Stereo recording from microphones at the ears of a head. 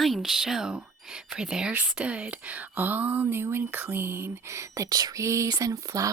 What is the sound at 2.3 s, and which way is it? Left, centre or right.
Speech, right.